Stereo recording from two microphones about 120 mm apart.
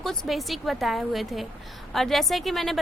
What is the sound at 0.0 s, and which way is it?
A woman's voice, 5° left (ahead or behind).